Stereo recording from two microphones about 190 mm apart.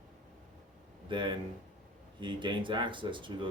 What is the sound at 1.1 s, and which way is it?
Speech, 25° right (ahead or behind).